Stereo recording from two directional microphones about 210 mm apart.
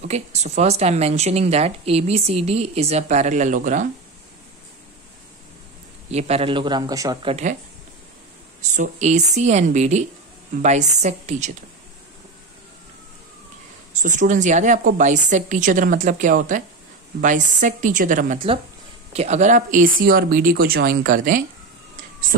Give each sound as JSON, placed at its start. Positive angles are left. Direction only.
{"t": 0.1, "sound": "speech", "side_deg": -30}
{"t": 6.0, "sound": "a man's voice", "side_deg": -30}
{"t": 8.5, "sound": "speech", "side_deg": -35}
{"t": 14.0, "sound": "speech", "side_deg": -35}